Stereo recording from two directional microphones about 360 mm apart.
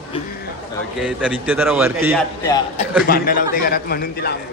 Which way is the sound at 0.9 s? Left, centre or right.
Centre.